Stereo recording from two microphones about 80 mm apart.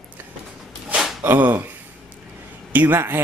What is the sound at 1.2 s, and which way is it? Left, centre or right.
Speech, right.